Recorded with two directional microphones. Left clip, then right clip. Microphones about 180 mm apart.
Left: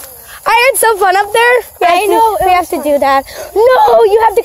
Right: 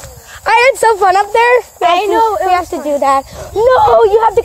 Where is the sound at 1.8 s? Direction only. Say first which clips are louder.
Left 2 dB; 60° left (ahead or behind).